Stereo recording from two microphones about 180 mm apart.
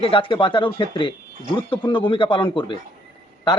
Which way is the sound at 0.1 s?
30° left (ahead or behind).